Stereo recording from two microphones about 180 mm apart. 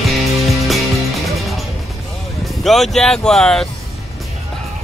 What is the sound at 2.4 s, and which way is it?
Speech, centre (ahead or behind).